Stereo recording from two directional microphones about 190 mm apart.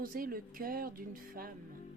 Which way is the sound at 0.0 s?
50° right (ahead or behind).